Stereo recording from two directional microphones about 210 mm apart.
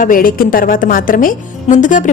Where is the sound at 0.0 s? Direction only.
40° left (ahead or behind).